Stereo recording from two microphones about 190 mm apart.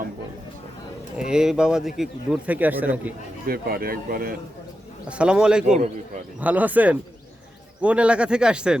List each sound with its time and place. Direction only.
1.3 s speech: 5° right (ahead or behind)
3.4 s speech: 50° right (ahead or behind)
5.0 s speech: 5° right (ahead or behind)